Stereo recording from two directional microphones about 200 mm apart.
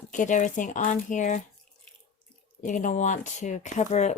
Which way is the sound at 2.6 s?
40° left (ahead or behind).